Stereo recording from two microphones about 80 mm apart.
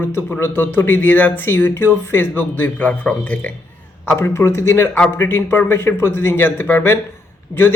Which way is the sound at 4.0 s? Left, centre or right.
Left.